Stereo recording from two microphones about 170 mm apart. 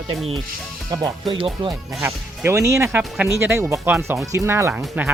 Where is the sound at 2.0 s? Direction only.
15° right (ahead or behind).